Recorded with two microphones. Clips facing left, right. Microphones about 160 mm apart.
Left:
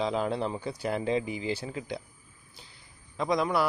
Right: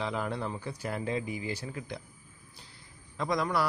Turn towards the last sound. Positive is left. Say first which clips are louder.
# left 3 dB
turn(degrees=20)  # may be behind; listen again after turning